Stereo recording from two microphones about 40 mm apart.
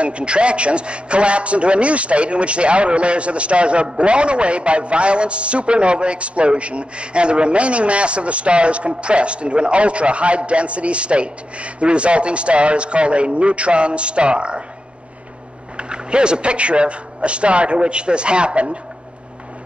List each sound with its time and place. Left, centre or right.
0.0 s a man's voice: right
15.9 s a man's voice: right